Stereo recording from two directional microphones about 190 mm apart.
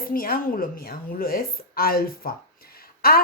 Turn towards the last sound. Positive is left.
turn(degrees=50)  # may be behind; listen again after turning